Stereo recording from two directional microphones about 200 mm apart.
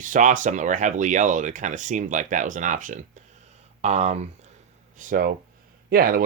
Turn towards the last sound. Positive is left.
turn(degrees=-45)  # may be behind; listen again after turning